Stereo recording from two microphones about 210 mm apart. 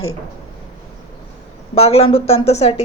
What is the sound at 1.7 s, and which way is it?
A woman's voice, 30° left (ahead or behind).